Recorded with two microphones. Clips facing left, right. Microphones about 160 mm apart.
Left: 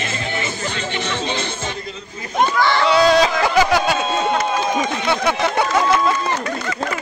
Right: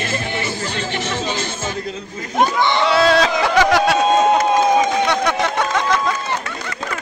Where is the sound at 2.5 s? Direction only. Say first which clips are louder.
Even; 20° right (ahead or behind).